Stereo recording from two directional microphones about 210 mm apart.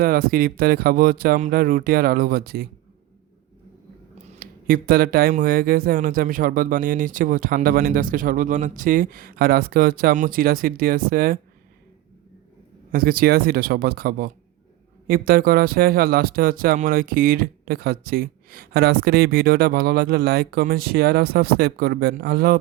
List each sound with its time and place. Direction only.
0.0 s speech: 45° right (ahead or behind)
4.4 s speech: 45° right (ahead or behind)
12.9 s speech: 45° right (ahead or behind)